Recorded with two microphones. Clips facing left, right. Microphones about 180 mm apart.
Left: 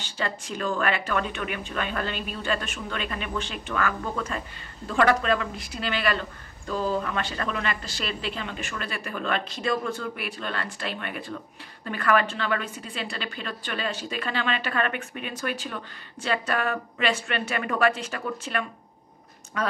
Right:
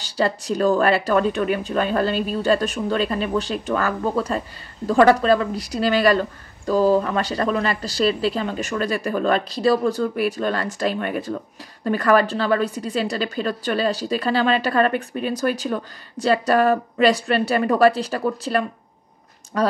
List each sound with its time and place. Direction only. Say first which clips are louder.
0.0 s a woman's voice: right 9 dB; 40° right (ahead or behind)